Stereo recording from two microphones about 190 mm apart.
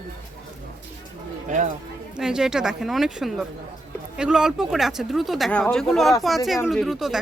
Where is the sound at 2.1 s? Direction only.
5° right (ahead or behind).